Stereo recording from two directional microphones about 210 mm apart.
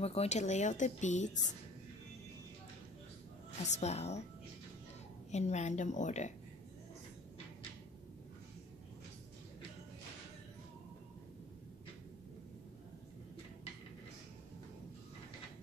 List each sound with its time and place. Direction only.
0.0 s a woman's voice: 30° left (ahead or behind)
3.6 s a woman's voice: 30° left (ahead or behind)
5.3 s a woman's voice: 35° left (ahead or behind)